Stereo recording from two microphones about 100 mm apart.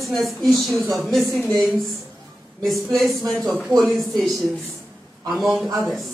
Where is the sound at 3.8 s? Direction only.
Centre (ahead or behind).